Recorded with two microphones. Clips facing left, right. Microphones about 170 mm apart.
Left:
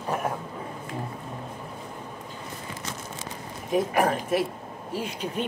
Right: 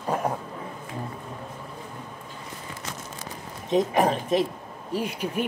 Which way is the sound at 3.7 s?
20° right (ahead or behind).